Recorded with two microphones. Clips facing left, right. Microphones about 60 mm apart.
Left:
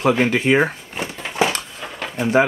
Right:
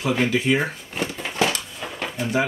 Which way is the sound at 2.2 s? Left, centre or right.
Left.